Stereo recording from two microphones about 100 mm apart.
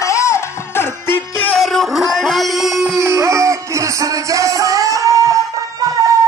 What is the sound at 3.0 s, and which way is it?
Music, 30° right (ahead or behind).